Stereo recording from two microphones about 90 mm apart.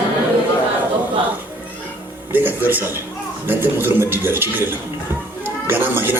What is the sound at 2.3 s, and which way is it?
Speech, 20° right (ahead or behind).